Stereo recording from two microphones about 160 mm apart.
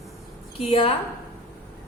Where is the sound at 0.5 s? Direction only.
35° left (ahead or behind).